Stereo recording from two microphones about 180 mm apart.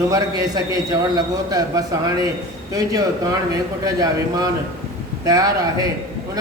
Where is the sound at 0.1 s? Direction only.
20° right (ahead or behind).